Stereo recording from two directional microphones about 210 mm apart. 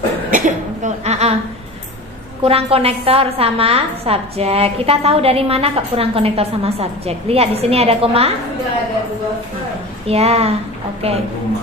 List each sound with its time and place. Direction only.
0.3 s a woman's voice: 35° right (ahead or behind)
2.4 s a woman's voice: 30° right (ahead or behind)
10.0 s a woman's voice: 30° right (ahead or behind)